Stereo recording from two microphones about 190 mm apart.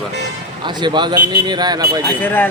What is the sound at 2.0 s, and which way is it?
Speech, 10° left (ahead or behind).